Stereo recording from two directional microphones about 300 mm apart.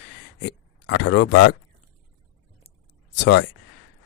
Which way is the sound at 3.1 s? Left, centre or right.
Left.